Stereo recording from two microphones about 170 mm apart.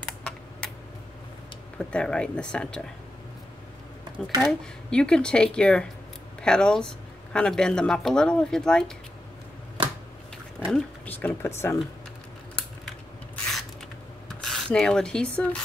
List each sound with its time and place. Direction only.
0.0 s typing: 5° left (ahead or behind)
1.8 s speech: 5° left (ahead or behind)
4.4 s speech: 5° left (ahead or behind)
9.8 s a sound: 30° right (ahead or behind)
10.7 s speech: 10° left (ahead or behind)
14.4 s speech: 5° left (ahead or behind)